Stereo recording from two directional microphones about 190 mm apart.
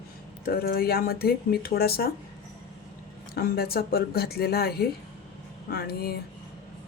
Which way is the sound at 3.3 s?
55° left (ahead or behind).